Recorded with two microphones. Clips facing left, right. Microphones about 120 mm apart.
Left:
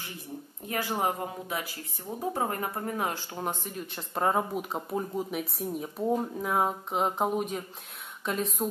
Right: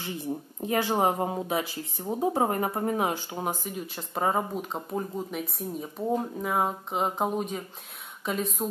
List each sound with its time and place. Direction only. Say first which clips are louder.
0.6 s speech: right 5 dB; 25° right (ahead or behind); by 8.6 s centre (ahead or behind)